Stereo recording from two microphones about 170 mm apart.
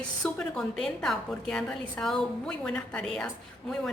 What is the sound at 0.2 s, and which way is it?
A woman's voice, 5° left (ahead or behind).